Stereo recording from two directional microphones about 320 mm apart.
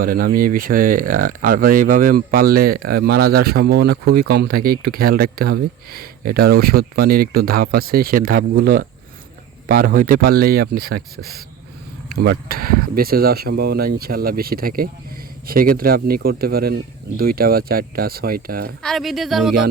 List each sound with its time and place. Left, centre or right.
0.0 s speech: right
18.8 s speech: centre